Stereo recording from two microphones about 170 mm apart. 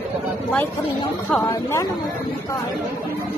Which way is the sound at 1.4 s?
15° left (ahead or behind).